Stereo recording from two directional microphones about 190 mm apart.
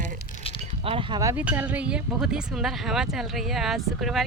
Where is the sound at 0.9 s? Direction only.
30° right (ahead or behind).